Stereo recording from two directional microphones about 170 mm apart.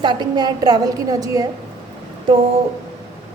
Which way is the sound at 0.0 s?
25° right (ahead or behind).